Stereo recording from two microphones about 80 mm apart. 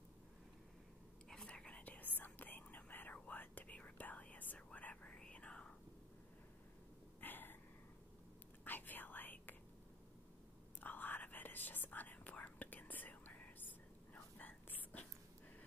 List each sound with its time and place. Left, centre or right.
1.3 s whispering: centre
7.2 s a sound: left
8.6 s whispering: left
10.8 s whispering: left